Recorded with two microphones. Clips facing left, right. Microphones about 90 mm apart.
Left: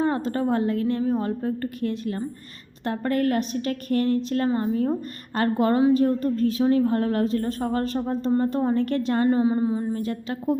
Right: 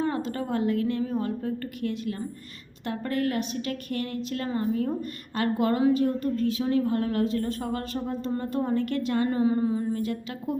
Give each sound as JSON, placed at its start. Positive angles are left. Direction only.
{"t": 0.0, "sound": "a woman's voice", "side_deg": 40}
{"t": 9.4, "sound": "a woman's voice", "side_deg": 25}